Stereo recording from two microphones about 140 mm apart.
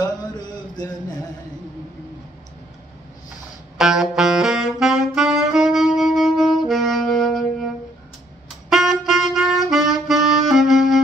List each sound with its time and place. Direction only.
0.0 s a sound: 30° left (ahead or behind)
3.7 s saxophone: 5° right (ahead or behind)
8.6 s saxophone: centre (ahead or behind)